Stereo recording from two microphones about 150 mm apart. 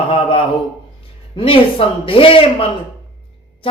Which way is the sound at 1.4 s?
35° left (ahead or behind).